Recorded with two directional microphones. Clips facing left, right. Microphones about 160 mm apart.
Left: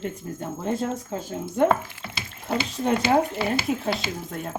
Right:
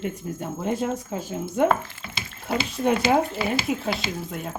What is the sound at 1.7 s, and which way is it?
Speech, 10° left (ahead or behind).